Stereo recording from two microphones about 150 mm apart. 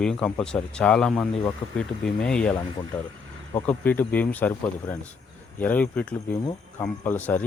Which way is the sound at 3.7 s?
10° left (ahead or behind).